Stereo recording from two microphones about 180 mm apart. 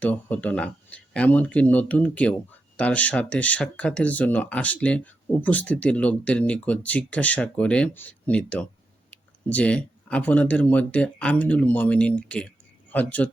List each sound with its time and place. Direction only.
0.0 s speech: 10° left (ahead or behind)